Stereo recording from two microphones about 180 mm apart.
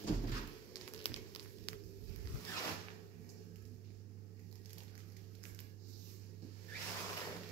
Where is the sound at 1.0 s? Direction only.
35° left (ahead or behind).